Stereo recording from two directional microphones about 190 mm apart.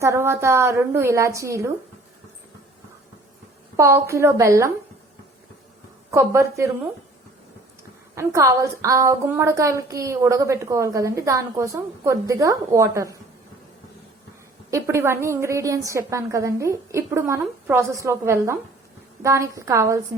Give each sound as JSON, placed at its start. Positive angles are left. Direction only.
{"t": 0.0, "sound": "a woman's voice", "side_deg": -15}
{"t": 3.8, "sound": "a woman's voice", "side_deg": -15}
{"t": 6.1, "sound": "a woman's voice", "side_deg": -15}
{"t": 8.1, "sound": "a woman's voice", "side_deg": -15}
{"t": 14.7, "sound": "a woman's voice", "side_deg": -15}